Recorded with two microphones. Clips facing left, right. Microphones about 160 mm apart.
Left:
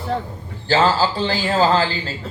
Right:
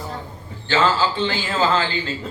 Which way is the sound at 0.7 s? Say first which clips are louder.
Left 2 dB; 40° left (ahead or behind).